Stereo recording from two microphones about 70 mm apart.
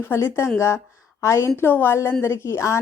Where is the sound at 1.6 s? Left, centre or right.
Left.